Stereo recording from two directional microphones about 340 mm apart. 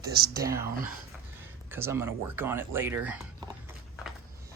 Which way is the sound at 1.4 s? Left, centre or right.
Centre.